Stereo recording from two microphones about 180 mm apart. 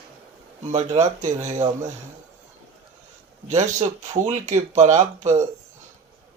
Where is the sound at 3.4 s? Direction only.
40° right (ahead or behind).